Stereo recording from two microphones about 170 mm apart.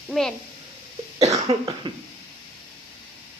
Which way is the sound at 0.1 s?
Centre (ahead or behind).